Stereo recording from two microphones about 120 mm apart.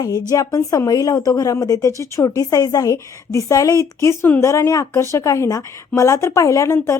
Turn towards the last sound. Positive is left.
turn(degrees=20)  # may be behind; listen again after turning